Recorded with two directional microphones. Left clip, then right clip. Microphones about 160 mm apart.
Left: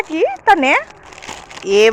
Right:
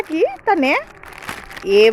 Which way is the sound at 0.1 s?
15° right (ahead or behind).